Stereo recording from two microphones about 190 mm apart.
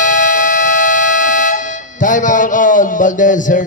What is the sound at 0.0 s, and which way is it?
Air horn, 45° left (ahead or behind).